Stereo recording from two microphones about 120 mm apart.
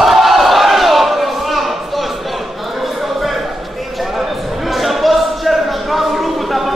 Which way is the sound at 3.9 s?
Centre (ahead or behind).